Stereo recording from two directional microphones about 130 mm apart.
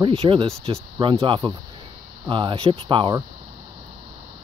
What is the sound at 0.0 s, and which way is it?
Speech, 45° right (ahead or behind).